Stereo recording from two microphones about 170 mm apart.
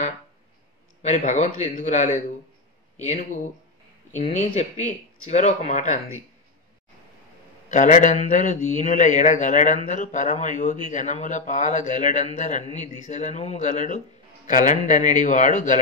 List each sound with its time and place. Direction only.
1.0 s a man's voice: 45° left (ahead or behind)
7.7 s a man's voice: 45° left (ahead or behind)